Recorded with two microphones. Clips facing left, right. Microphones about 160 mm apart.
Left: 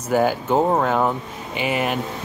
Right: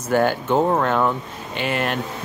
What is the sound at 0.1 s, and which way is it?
Speech, 5° left (ahead or behind).